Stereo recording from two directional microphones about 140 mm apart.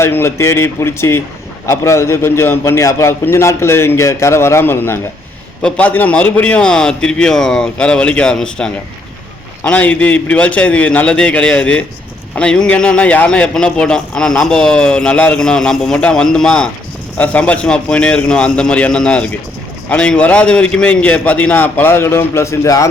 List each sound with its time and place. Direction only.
0.0 s a man's voice: 20° left (ahead or behind)